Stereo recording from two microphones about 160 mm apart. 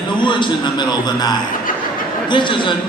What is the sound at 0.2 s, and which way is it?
A man's voice, 30° left (ahead or behind).